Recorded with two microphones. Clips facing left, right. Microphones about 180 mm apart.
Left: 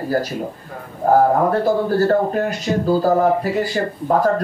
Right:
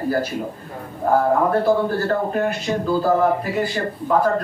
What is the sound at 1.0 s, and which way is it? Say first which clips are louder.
Speech: left 3 dB; 40° left (ahead or behind).